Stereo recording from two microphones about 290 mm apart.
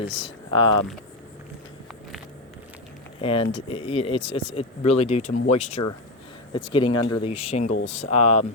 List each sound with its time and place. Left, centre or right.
0.0 s speech: centre
3.2 s speech: centre